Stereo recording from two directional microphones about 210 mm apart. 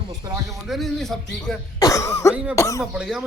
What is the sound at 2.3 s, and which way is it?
Speech, 5° right (ahead or behind).